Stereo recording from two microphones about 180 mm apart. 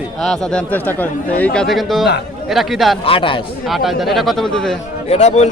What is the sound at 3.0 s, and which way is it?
Speech, 30° left (ahead or behind).